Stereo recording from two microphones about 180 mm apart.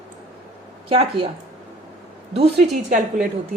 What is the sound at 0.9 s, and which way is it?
Speech, 30° right (ahead or behind).